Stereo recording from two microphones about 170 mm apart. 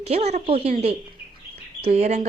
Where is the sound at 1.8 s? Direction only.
40° right (ahead or behind).